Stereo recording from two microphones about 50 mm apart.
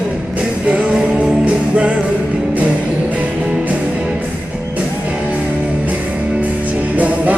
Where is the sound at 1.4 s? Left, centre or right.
Right.